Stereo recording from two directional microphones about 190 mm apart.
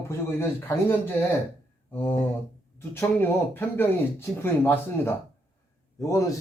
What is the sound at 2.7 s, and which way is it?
A man's voice, 10° left (ahead or behind).